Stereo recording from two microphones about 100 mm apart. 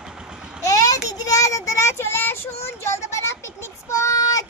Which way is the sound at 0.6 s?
35° left (ahead or behind).